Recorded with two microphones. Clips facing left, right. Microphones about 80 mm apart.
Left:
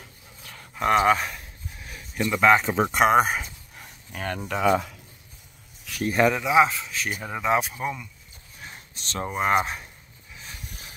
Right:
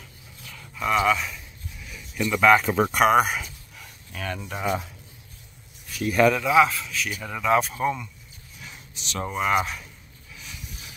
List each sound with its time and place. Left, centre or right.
0.5 s a sound: left
2.3 s speech: centre; by 4.6 s left
4.6 s speech: left
6.0 s speech: left
7.6 s speech: centre
8.5 s a sound: left
9.4 s speech: left
10.3 s pulleys: left